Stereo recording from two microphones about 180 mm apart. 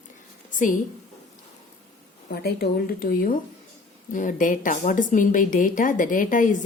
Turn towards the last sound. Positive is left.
turn(degrees=45)  # may be behind; listen again after turning